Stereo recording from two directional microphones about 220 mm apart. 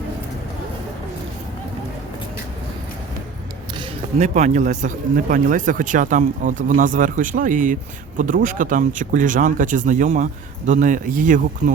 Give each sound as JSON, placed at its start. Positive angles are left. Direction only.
{"t": 3.8, "sound": "speech", "side_deg": -30}